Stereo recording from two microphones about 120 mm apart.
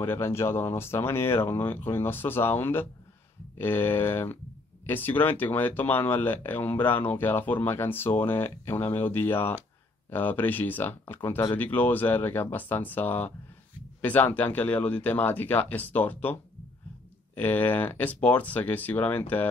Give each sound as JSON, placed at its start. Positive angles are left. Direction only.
{"t": 0.0, "sound": "speech", "side_deg": 20}
{"t": 17.4, "sound": "speech", "side_deg": 15}